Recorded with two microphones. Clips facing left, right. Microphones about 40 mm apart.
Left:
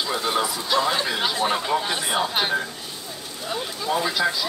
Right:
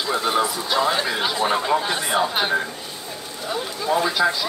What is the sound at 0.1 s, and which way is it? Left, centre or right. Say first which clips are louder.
Speech: right 5 dB; centre.